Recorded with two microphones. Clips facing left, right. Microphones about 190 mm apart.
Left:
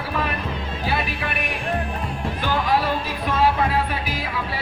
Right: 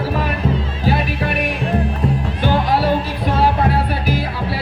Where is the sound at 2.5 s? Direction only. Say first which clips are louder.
Right 4 dB; 35° right (ahead or behind).